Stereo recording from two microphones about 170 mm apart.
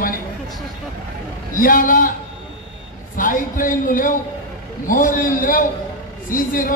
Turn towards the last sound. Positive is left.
turn(degrees=55)  # may be behind; listen again after turning